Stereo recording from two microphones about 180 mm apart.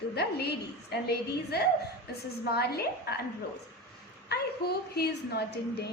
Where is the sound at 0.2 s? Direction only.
65° left (ahead or behind).